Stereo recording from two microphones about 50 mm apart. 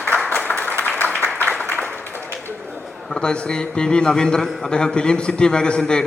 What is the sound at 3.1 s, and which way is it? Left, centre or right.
A man's voice, centre.